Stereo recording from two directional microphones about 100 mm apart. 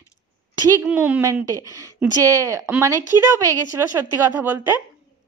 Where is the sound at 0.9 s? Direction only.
15° right (ahead or behind).